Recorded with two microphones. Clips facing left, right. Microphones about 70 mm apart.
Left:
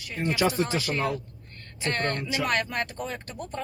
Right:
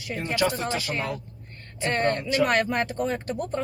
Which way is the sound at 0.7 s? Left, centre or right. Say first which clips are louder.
Left 2 dB; right.